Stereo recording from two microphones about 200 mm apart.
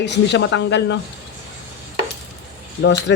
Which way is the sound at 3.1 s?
60° left (ahead or behind).